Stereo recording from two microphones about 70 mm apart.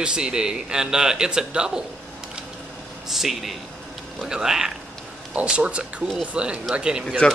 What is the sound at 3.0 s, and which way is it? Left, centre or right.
Speech, centre.